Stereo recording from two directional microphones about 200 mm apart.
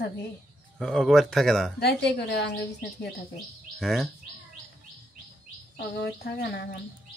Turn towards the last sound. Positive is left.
turn(degrees=50)  # may be behind; listen again after turning